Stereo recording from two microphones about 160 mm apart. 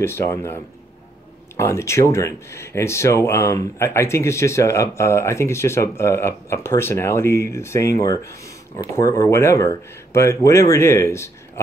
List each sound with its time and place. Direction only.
0.0 s speech: 15° left (ahead or behind)
1.6 s speech: 15° left (ahead or behind)